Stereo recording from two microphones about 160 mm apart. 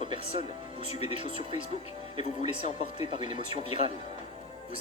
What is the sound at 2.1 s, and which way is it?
Speech, 45° left (ahead or behind).